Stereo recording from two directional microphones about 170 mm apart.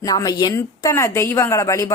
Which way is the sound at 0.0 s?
20° left (ahead or behind).